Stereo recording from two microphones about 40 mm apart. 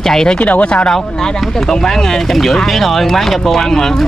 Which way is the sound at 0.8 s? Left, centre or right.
Centre.